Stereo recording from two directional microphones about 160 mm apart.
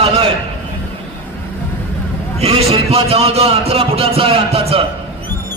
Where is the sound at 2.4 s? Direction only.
40° right (ahead or behind).